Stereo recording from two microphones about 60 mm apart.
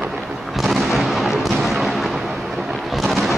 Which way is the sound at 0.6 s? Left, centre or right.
Centre.